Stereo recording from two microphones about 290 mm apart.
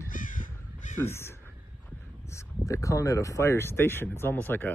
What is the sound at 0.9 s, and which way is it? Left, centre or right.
Speech, centre.